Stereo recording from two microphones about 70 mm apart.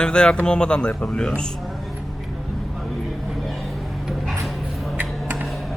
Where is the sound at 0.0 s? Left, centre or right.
Centre.